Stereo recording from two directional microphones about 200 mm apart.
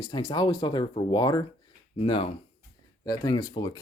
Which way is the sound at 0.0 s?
25° left (ahead or behind).